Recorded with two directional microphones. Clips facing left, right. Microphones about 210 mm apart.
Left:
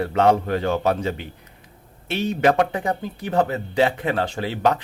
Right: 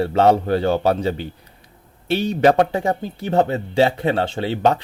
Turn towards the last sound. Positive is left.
turn(degrees=-30)  # may be behind; listen again after turning